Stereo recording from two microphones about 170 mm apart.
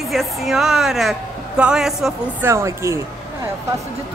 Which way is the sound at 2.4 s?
15° right (ahead or behind).